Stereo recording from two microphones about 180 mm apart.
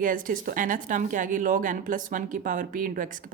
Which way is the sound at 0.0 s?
50° right (ahead or behind).